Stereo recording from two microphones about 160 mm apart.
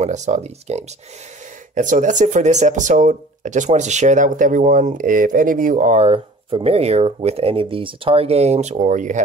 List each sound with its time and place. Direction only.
0.0 s speech: 45° right (ahead or behind)